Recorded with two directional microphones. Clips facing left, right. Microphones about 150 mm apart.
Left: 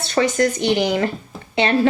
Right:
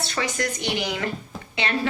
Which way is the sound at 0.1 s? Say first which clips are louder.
Left 12 dB; 40° left (ahead or behind).